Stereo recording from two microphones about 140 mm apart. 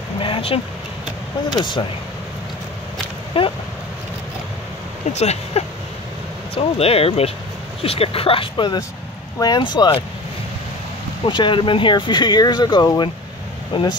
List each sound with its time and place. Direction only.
0.2 s vehicle: 40° left (ahead or behind)
1.6 s speech: 35° left (ahead or behind)
3.3 s speech: 40° left (ahead or behind)
5.1 s speech: 50° left (ahead or behind); by 10.0 s 30° left (ahead or behind)
11.2 s speech: 35° left (ahead or behind)